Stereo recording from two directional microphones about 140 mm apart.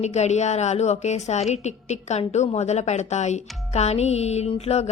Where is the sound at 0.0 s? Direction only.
55° left (ahead or behind).